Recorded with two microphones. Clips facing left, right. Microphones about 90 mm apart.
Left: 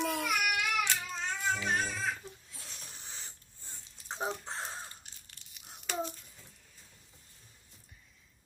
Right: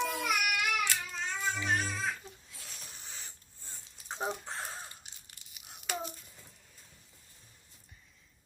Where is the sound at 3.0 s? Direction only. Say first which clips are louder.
Even; 30° left (ahead or behind).